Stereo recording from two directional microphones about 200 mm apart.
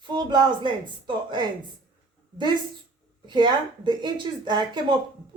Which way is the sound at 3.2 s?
20° right (ahead or behind).